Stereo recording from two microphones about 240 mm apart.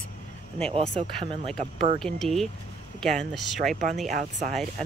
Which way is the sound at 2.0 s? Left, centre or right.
Centre.